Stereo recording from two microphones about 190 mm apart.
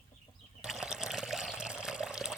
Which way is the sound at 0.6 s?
5° right (ahead or behind).